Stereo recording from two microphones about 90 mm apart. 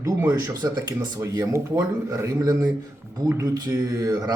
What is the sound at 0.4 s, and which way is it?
Speech, 45° right (ahead or behind).